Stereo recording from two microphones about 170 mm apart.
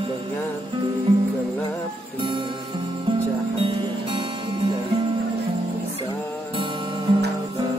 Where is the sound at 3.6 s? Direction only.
30° right (ahead or behind).